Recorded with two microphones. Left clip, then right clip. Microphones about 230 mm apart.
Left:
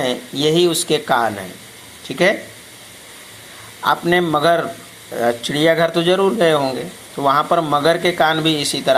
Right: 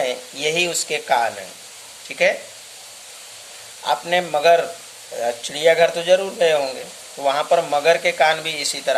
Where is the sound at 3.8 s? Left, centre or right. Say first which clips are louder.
Left 4 dB; centre.